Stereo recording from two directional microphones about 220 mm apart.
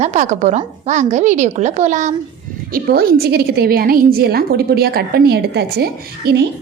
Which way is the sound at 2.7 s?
45° right (ahead or behind).